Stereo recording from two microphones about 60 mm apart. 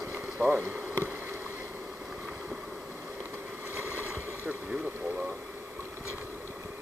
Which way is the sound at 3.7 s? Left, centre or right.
Right.